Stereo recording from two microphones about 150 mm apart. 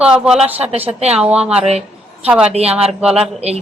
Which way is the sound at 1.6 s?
45° right (ahead or behind).